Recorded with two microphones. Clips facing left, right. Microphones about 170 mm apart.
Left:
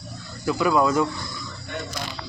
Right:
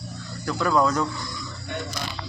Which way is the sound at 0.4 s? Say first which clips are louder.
Left 2 dB; 10° left (ahead or behind).